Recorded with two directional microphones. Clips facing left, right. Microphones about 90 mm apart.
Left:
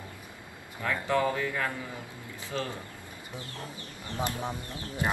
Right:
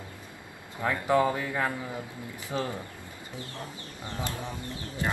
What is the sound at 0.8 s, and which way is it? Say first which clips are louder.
Speech: right 3 dB; 20° right (ahead or behind).